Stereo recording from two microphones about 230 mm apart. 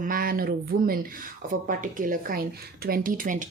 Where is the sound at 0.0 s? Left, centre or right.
Right.